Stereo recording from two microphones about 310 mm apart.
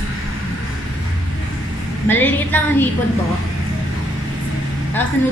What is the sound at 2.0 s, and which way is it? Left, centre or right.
Speech, centre.